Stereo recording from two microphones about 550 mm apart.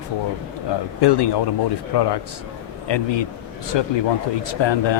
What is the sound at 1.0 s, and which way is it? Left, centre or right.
Speech, left.